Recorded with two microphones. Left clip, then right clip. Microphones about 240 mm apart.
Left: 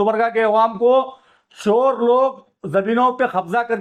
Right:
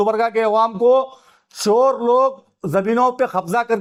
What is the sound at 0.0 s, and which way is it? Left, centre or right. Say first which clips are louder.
A man's voice: even; right.